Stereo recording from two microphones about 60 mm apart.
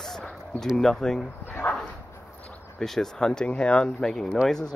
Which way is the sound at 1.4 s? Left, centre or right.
Left.